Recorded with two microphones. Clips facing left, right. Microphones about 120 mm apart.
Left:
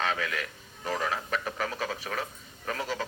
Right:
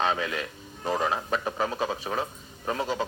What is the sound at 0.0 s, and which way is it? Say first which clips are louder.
A man's voice: right 4 dB; 25° right (ahead or behind).